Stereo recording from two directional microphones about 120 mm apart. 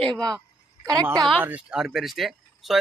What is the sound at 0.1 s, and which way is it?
Speech, 30° right (ahead or behind).